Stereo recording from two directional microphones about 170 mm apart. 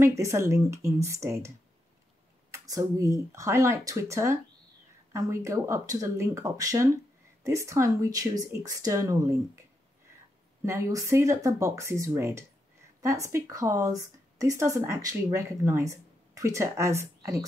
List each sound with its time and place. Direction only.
0.0 s speech: 15° right (ahead or behind)
2.5 s speech: 20° right (ahead or behind)
10.6 s speech: 15° right (ahead or behind)